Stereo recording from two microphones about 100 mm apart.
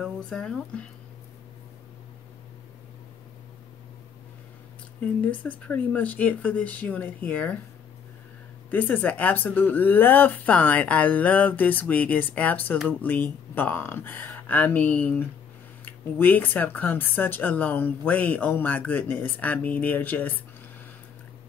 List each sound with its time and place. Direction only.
0.0 s speech: 5° left (ahead or behind)
5.0 s speech: 15° left (ahead or behind)
8.6 s speech: 15° left (ahead or behind)